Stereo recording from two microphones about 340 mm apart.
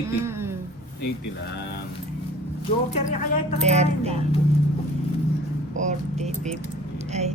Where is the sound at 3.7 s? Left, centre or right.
Centre.